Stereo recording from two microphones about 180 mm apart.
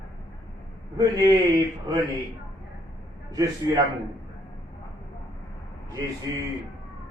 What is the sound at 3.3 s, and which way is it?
Speech, 20° right (ahead or behind).